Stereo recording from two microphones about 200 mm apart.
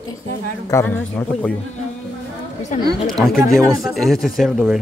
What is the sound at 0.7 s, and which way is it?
Speech, 10° left (ahead or behind).